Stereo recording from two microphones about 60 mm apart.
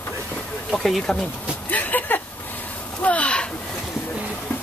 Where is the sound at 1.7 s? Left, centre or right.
Left.